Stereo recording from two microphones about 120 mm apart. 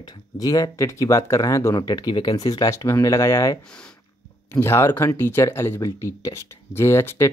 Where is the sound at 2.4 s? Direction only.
30° left (ahead or behind).